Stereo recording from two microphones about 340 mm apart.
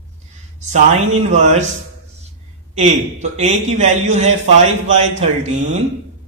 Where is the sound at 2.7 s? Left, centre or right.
Centre.